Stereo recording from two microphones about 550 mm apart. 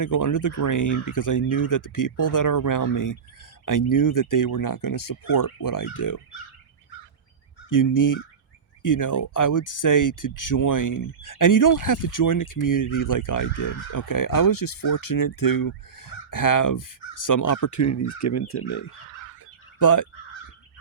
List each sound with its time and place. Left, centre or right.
0.0 s speech: left
7.7 s speech: left
13.6 s speech: left
13.9 s speech: left
19.8 s speech: left